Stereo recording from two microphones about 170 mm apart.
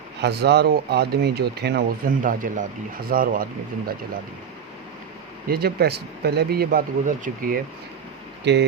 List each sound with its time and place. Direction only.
0.2 s speech: 75° right (ahead or behind)
2.2 s speech: 50° right (ahead or behind)
5.5 s speech: 65° right (ahead or behind)
8.5 s speech: 85° right